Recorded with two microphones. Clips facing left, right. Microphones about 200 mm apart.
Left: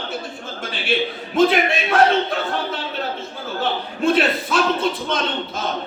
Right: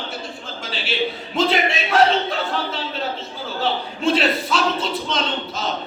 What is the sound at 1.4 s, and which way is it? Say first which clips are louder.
Speech: left 4 dB; 55° left (ahead or behind).